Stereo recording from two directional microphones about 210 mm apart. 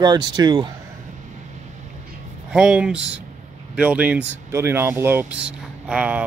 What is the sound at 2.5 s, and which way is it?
Speech, 5° right (ahead or behind).